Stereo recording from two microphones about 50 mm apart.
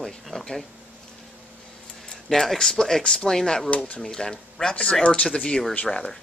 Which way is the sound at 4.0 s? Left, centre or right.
Centre.